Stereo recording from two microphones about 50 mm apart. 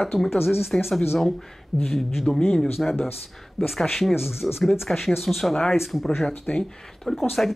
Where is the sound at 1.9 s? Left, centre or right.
Centre.